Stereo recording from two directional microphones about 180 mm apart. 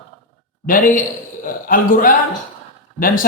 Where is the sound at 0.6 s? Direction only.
50° left (ahead or behind).